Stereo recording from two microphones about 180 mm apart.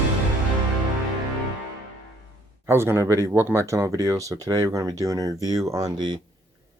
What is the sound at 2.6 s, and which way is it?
Speech, 15° right (ahead or behind).